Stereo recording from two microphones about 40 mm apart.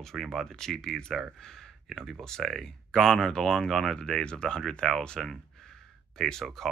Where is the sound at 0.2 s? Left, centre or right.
Centre.